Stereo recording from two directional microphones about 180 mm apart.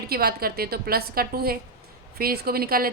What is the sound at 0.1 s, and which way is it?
A woman's voice, 60° right (ahead or behind).